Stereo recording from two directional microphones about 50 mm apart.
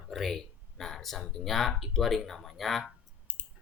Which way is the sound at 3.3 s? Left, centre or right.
Right.